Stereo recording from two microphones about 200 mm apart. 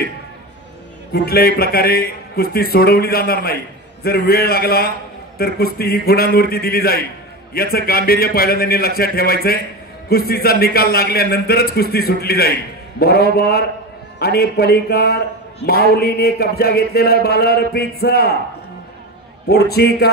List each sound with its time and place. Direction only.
1.1 s a man's voice: 50° left (ahead or behind)
19.4 s a man's voice: 55° left (ahead or behind)